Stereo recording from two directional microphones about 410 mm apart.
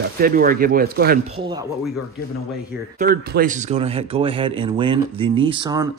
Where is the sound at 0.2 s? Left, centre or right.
Right.